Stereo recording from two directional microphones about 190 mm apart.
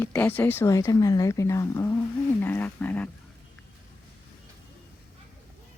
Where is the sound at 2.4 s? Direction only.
10° left (ahead or behind).